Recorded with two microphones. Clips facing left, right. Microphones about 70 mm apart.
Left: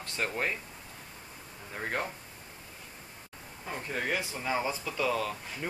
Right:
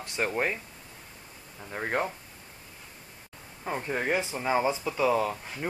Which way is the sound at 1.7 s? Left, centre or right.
Centre.